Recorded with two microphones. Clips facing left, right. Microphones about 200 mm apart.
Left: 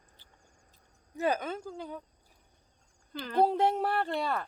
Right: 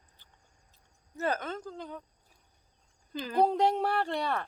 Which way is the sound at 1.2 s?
10° left (ahead or behind).